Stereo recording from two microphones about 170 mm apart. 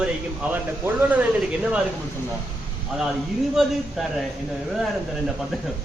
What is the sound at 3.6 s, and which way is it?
Speech, centre (ahead or behind).